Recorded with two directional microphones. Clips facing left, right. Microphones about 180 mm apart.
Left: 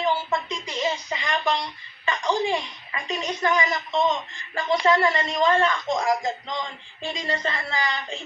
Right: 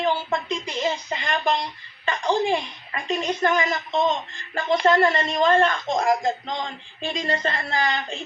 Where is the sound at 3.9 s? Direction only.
20° right (ahead or behind).